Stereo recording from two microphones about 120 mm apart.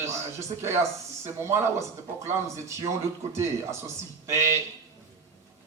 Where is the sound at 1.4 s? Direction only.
25° right (ahead or behind).